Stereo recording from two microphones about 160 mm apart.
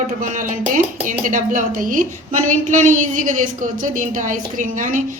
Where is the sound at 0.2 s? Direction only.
55° right (ahead or behind).